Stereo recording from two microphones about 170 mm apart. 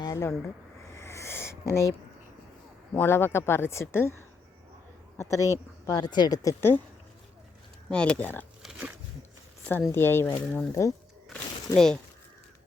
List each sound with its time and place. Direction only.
0.0 s speech: 20° left (ahead or behind)
0.9 s owl: 15° left (ahead or behind)
2.9 s speech: 10° left (ahead or behind)
5.1 s a woman's voice: 15° left (ahead or behind)
7.9 s speech: 5° left (ahead or behind)
9.6 s speech: 10° left (ahead or behind)
11.3 s a sound: 5° left (ahead or behind)